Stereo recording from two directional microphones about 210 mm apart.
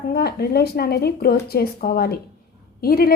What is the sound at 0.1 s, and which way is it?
A woman's voice, 50° left (ahead or behind).